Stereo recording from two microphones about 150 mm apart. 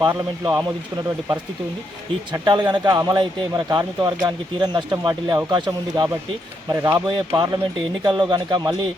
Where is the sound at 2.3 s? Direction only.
30° right (ahead or behind).